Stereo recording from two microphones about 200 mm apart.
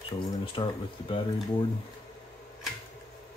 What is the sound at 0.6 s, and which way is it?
Speech, 25° left (ahead or behind).